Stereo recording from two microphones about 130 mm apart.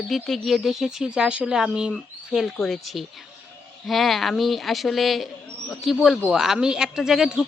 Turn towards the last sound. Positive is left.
turn(degrees=-5)  # may be behind; listen again after turning